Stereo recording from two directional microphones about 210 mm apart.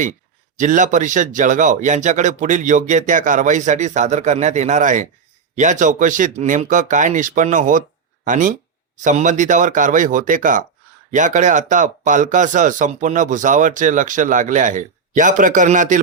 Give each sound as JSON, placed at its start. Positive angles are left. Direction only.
{"t": 0.5, "sound": "speech", "side_deg": -35}